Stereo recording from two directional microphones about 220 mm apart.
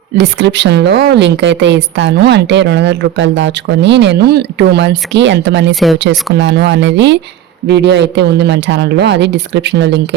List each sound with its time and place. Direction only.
0.2 s a woman's voice: 55° right (ahead or behind)